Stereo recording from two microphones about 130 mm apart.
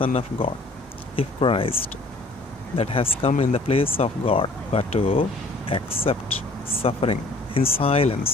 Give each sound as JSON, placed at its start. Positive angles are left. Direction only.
{"t": 0.0, "sound": "speech", "side_deg": 45}